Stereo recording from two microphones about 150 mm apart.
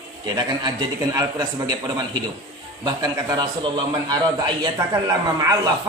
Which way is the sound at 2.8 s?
25° right (ahead or behind).